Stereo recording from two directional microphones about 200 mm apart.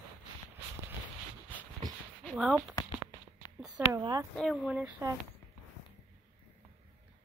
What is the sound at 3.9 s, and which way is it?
Speech, 15° right (ahead or behind).